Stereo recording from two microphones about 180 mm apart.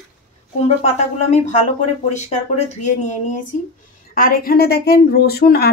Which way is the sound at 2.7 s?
40° left (ahead or behind).